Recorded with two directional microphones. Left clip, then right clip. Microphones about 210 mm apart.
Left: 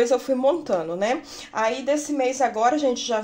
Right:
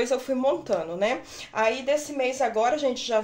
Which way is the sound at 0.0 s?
25° left (ahead or behind).